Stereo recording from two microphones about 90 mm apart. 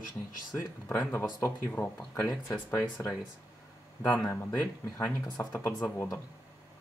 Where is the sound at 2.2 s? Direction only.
15° left (ahead or behind).